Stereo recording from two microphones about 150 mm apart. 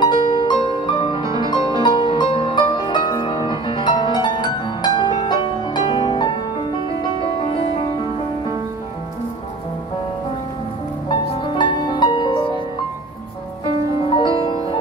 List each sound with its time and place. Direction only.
0.0 s music: 30° left (ahead or behind)
1.2 s music: 25° right (ahead or behind)
2.0 s music: 35° left (ahead or behind)
11.2 s music: 30° left (ahead or behind)
14.1 s music: 35° left (ahead or behind)